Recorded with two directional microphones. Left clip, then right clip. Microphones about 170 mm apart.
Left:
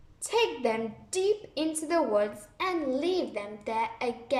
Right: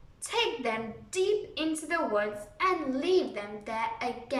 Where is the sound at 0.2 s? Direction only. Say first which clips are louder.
Left 3 dB; 25° left (ahead or behind).